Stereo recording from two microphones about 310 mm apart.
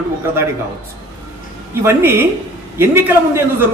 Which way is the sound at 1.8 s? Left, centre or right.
Centre.